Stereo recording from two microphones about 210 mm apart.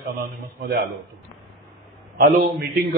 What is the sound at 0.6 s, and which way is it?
Speech, 50° right (ahead or behind).